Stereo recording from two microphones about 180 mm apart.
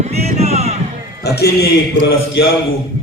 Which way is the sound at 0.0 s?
35° right (ahead or behind).